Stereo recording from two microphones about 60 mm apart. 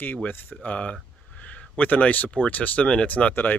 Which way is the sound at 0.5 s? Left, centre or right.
Left.